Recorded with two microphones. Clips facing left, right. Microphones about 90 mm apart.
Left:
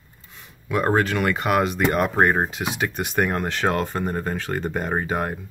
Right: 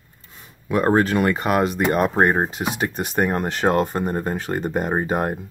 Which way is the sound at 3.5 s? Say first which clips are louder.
Right 5 dB; 35° right (ahead or behind).